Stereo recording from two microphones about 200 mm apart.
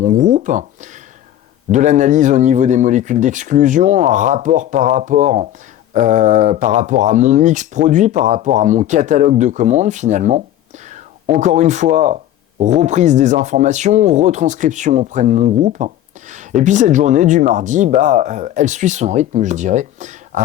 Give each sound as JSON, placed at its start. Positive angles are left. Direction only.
{"t": 0.0, "sound": "speech", "side_deg": -40}